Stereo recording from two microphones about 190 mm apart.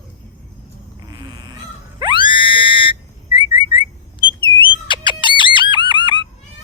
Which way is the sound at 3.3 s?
25° right (ahead or behind).